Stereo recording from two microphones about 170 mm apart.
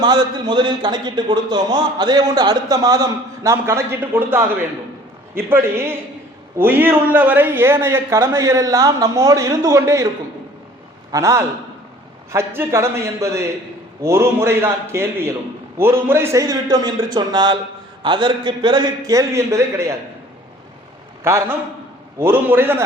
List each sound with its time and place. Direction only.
0.0 s a man's voice: 25° right (ahead or behind)
11.1 s a man's voice: 15° right (ahead or behind)
21.2 s speech: 15° right (ahead or behind)